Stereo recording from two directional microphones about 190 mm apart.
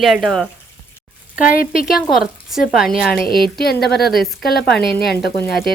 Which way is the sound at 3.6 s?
55° left (ahead or behind).